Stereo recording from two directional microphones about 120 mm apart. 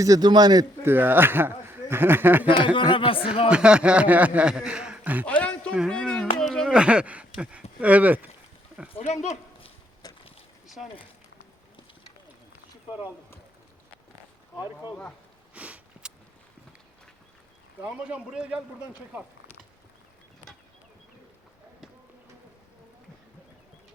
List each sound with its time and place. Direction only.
0.0 s a man's voice: 30° right (ahead or behind)
0.9 s speech: 15° right (ahead or behind)
2.7 s speech: 45° left (ahead or behind)
3.5 s speech: 10° right (ahead or behind)
5.2 s speech: 10° left (ahead or behind)
6.4 s a sound: 5° left (ahead or behind)
6.7 s speech: 10° right (ahead or behind)
9.0 s speech: 70° left (ahead or behind)
10.0 s a sound: 35° left (ahead or behind)
15.5 s a sound: 10° right (ahead or behind)
17.8 s speech: 10° right (ahead or behind)